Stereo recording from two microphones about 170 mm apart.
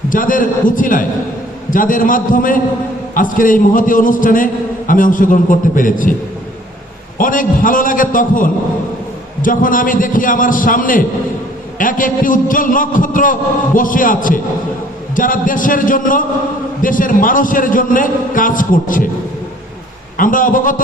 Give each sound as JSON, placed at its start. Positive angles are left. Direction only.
{"t": 0.1, "sound": "a man's voice", "side_deg": 50}
{"t": 7.2, "sound": "a man's voice", "side_deg": 50}
{"t": 20.1, "sound": "a man's voice", "side_deg": 50}